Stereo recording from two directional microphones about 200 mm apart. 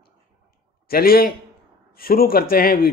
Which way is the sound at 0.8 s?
50° left (ahead or behind).